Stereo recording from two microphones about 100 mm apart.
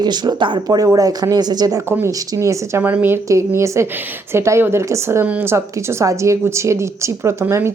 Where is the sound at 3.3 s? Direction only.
30° right (ahead or behind).